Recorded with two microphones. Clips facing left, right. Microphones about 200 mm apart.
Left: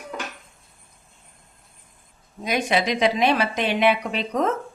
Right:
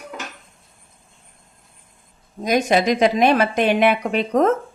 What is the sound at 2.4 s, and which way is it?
A woman's voice, 45° right (ahead or behind).